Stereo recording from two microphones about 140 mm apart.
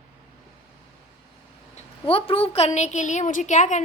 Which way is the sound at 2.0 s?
40° left (ahead or behind).